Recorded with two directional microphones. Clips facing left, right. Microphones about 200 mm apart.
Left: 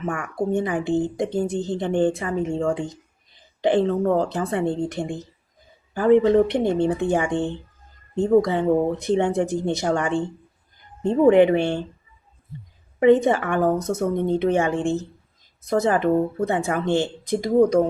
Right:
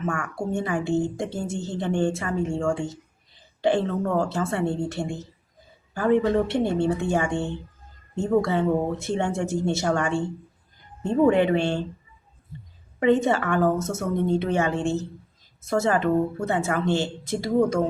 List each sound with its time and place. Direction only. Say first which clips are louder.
0.0 s a woman's voice: left 3 dB; 20° left (ahead or behind)
13.0 s a woman's voice: left 4 dB; 15° left (ahead or behind)